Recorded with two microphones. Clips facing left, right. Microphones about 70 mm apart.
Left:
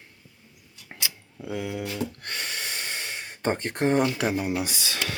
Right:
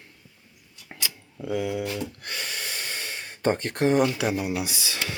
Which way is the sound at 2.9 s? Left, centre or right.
Left.